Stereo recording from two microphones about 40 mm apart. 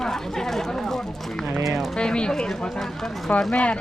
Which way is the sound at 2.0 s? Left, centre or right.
Left.